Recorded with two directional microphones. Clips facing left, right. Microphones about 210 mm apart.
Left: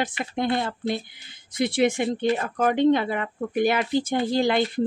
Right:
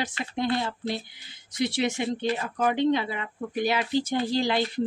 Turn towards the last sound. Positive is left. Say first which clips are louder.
# left 3 dB
turn(degrees=50)  # may be behind; listen again after turning